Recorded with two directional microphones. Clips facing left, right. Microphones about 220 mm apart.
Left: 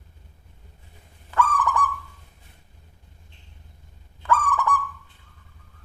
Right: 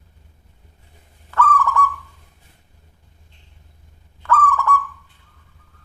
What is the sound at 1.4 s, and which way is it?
Owl, 15° left (ahead or behind).